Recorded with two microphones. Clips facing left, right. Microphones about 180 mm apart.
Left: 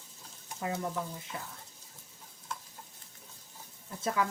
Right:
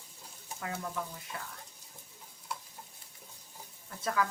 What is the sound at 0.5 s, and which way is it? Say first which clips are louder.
Speech: left 4 dB; 20° left (ahead or behind).